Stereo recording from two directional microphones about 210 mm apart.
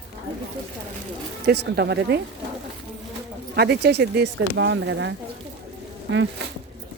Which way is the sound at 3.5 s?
50° right (ahead or behind).